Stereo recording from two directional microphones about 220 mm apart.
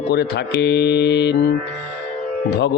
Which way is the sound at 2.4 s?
50° left (ahead or behind).